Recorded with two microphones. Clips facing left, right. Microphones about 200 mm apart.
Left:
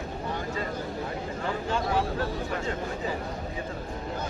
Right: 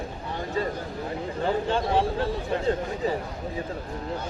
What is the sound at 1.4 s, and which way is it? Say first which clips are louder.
A man's voice: right 4 dB; 30° right (ahead or behind).